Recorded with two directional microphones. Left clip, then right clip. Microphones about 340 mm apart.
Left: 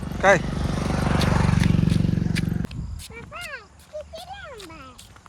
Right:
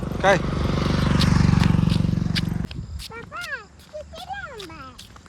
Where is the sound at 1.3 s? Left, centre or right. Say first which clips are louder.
Right 1 dB; centre.